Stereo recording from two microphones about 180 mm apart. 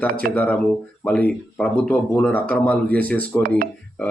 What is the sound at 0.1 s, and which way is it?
Speech, 55° right (ahead or behind).